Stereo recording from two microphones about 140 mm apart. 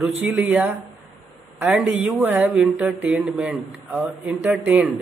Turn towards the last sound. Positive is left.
turn(degrees=-15)  # may be behind; listen again after turning